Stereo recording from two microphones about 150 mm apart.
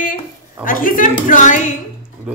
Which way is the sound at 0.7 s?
65° left (ahead or behind).